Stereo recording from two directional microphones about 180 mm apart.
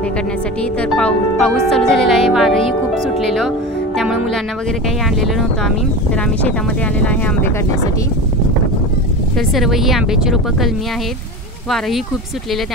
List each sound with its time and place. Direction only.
0.6 s speech: 5° left (ahead or behind)
7.0 s speech: 10° left (ahead or behind)
9.5 s speech: centre (ahead or behind)